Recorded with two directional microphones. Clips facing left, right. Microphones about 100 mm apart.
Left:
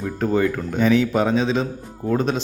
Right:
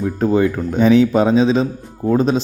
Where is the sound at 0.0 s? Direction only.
20° right (ahead or behind).